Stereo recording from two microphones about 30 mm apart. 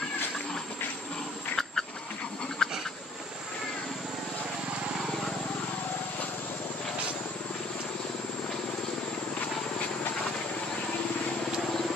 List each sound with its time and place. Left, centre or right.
2.6 s insect: left